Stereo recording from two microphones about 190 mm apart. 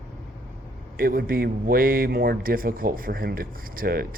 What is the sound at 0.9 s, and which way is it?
Speech, 50° right (ahead or behind).